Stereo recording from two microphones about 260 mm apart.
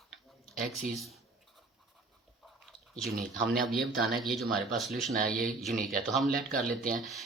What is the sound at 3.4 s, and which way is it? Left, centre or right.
Speech, centre.